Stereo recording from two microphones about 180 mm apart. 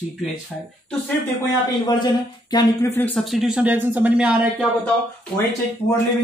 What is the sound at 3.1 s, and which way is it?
Speech, centre (ahead or behind).